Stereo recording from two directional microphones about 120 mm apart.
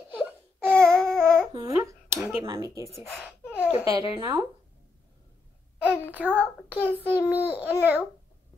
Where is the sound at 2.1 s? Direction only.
10° right (ahead or behind).